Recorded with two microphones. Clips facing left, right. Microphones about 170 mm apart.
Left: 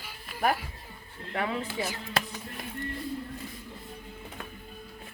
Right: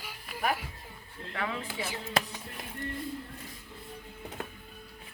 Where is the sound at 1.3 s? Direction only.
30° left (ahead or behind).